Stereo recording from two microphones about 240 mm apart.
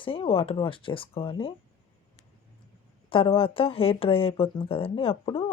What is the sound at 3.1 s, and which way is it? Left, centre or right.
Speech, left.